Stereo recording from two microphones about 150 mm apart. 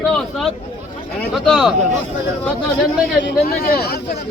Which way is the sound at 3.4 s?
90° left.